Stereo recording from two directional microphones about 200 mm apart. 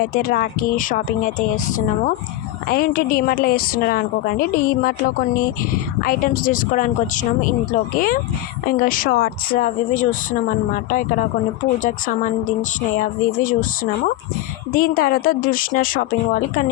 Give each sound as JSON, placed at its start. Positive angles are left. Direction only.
{"t": 0.0, "sound": "a woman's voice", "side_deg": 45}